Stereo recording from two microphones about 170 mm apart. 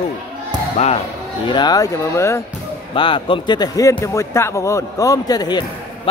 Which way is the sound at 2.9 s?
30° left (ahead or behind).